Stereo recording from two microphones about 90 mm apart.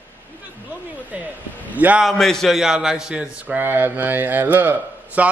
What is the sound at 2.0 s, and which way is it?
A man's voice, 5° left (ahead or behind).